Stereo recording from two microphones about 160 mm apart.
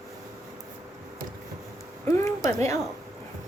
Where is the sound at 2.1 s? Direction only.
15° left (ahead or behind).